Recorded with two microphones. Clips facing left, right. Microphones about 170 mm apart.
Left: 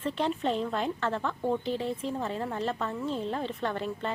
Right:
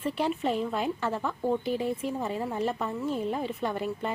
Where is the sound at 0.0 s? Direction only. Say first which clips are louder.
Right 1 dB; 10° right (ahead or behind).